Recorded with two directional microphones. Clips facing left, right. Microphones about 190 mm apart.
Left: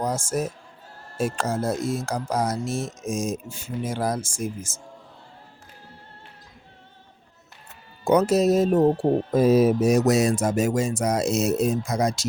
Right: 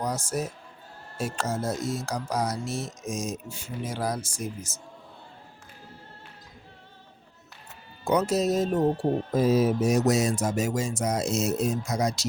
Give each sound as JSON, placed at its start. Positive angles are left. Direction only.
{"t": 0.0, "sound": "speech", "side_deg": 50}
{"t": 8.0, "sound": "speech", "side_deg": 60}